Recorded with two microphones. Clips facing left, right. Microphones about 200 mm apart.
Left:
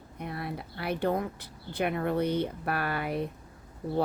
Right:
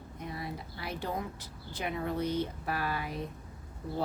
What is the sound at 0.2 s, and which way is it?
Speech, 60° left (ahead or behind).